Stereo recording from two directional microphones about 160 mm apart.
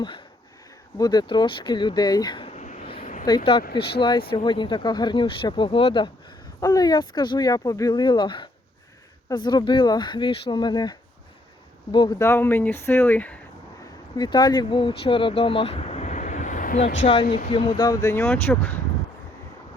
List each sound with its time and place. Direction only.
0.9 s speech: 25° left (ahead or behind)
2.5 s a sound: 45° left (ahead or behind)
3.2 s speech: 30° left (ahead or behind)
3.6 s speech: 85° left
4.3 s speech: 30° left (ahead or behind)
12.2 s speech: 15° left (ahead or behind)
14.2 s speech: 25° left (ahead or behind); by 16.8 s 55° left (ahead or behind)
17.3 s speech: 35° left (ahead or behind); by 18.8 s 10° left (ahead or behind)